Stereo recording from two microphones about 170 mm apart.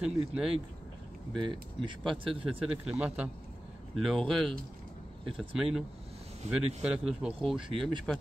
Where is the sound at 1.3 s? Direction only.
25° right (ahead or behind).